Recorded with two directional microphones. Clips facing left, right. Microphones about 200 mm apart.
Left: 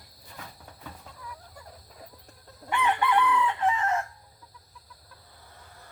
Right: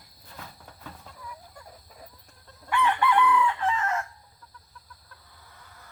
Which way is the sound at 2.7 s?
20° left (ahead or behind).